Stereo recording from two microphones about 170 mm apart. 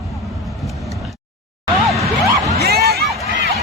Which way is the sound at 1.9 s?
20° right (ahead or behind).